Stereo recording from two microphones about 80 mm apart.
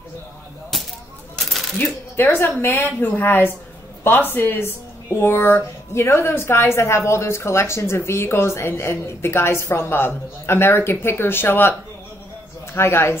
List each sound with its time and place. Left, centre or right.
2.1 s a woman's voice: left
12.7 s speech: left